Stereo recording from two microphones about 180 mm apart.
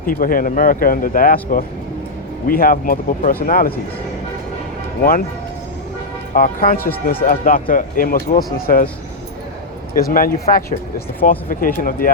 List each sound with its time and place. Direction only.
0.0 s speech: 50° left (ahead or behind)
6.3 s speech: 55° left (ahead or behind)
9.9 s speech: 55° left (ahead or behind)